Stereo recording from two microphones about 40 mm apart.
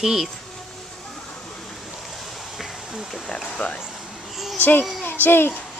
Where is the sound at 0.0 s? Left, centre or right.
Centre.